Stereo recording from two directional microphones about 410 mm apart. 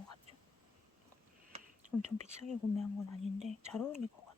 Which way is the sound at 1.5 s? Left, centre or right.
Centre.